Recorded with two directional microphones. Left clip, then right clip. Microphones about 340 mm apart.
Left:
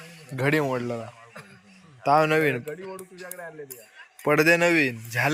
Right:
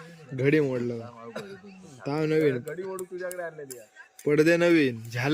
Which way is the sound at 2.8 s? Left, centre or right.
Right.